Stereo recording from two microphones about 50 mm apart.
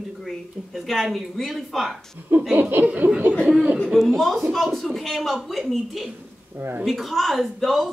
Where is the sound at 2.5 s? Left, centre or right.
Right.